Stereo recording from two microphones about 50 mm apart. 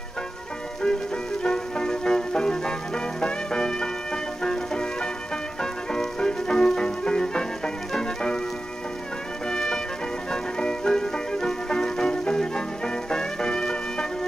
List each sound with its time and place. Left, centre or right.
1.4 s music: centre
9.5 s music: centre